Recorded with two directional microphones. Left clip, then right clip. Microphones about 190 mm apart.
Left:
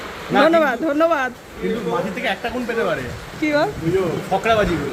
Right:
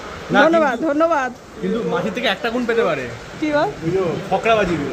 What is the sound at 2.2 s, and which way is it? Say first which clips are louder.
Speech: right 3 dB; 60° right (ahead or behind).